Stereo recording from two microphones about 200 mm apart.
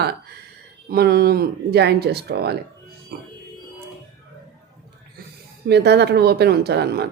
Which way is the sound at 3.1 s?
50° right (ahead or behind).